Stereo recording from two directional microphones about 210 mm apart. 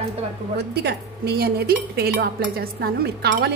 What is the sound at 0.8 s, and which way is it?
A woman's voice, 50° right (ahead or behind).